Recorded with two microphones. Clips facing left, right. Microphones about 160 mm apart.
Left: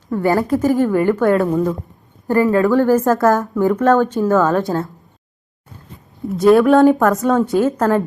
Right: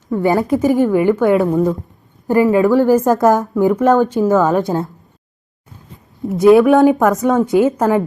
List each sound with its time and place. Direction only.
0.2 s a woman's voice: 15° right (ahead or behind)
1.4 s a woman's voice: centre (ahead or behind)
2.2 s a woman's voice: 15° right (ahead or behind)
6.3 s a woman's voice: 20° right (ahead or behind)